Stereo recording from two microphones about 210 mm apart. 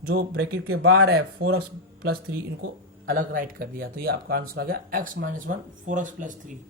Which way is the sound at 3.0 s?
40° right (ahead or behind).